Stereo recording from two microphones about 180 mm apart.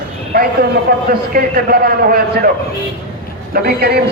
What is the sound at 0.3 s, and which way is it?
A man's voice, 60° right (ahead or behind).